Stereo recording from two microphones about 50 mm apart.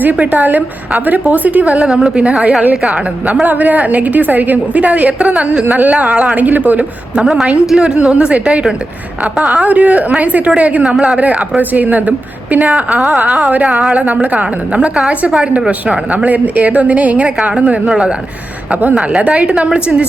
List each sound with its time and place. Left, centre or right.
0.0 s a woman's voice: right
1.9 s a woman's voice: centre
3.4 s a woman's voice: right
7.2 s a woman's voice: centre
7.7 s a woman's voice: centre
13.2 s a woman's voice: centre
13.5 s a woman's voice: right
15.9 s a woman's voice: right